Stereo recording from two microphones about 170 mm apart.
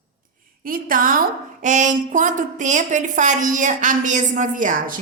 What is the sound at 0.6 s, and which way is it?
A woman's voice, 55° right (ahead or behind).